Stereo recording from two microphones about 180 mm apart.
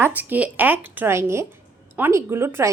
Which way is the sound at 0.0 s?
10° right (ahead or behind).